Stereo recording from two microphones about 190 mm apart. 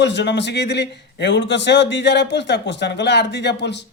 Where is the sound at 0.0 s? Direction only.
65° left (ahead or behind).